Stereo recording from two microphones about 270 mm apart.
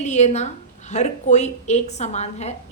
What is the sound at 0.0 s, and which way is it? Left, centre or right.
A woman's voice, left.